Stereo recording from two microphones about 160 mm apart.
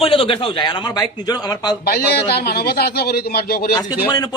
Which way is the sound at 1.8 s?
80° left.